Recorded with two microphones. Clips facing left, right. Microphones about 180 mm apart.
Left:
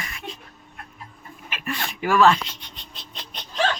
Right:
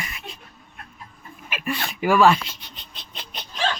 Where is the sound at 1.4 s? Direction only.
10° right (ahead or behind).